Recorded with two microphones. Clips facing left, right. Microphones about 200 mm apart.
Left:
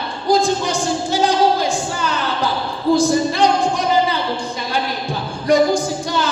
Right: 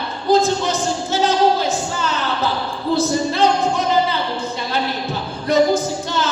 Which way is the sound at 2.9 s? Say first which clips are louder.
Left 2 dB; 15° left (ahead or behind).